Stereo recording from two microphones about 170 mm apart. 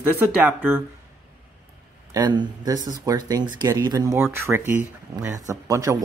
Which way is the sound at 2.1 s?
25° right (ahead or behind).